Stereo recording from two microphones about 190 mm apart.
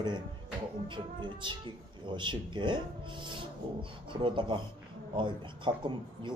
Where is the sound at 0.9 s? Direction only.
25° right (ahead or behind).